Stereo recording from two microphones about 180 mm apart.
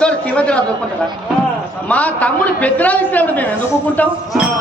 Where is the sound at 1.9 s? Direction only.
5° left (ahead or behind).